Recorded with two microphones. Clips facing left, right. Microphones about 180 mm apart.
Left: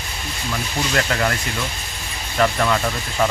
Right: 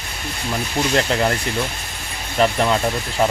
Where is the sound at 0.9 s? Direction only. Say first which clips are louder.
Right 2 dB; 25° right (ahead or behind).